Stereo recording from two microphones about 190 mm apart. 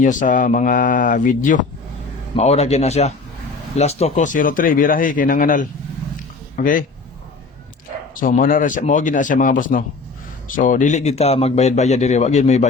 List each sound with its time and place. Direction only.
0.0 s a man's voice: 40° left (ahead or behind)
8.1 s a man's voice: 45° left (ahead or behind)